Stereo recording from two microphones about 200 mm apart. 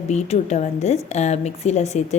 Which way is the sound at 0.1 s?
35° left (ahead or behind).